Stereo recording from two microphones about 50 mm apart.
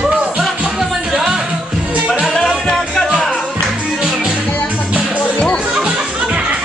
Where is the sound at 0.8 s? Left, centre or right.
Centre.